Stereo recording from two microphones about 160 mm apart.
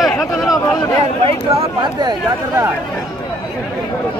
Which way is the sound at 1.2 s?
35° right (ahead or behind).